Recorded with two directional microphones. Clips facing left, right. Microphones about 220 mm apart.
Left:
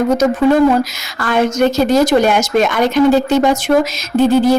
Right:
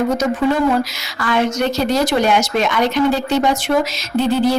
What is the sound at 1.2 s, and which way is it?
A woman's voice, 50° left (ahead or behind).